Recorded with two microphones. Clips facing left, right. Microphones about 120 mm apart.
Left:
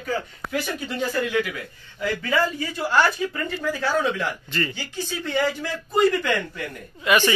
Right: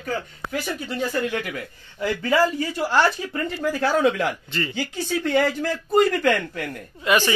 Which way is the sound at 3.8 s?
70° right (ahead or behind).